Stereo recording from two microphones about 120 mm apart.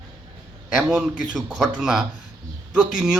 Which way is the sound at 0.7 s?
5° right (ahead or behind).